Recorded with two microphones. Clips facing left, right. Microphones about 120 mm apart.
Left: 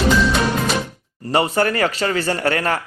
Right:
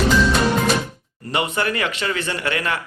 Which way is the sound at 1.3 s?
40° left (ahead or behind).